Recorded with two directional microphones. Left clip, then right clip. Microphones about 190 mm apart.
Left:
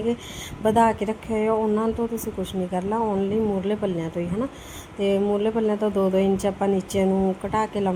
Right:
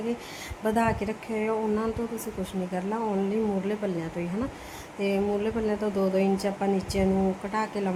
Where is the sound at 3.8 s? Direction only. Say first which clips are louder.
Left 4 dB; 15° left (ahead or behind).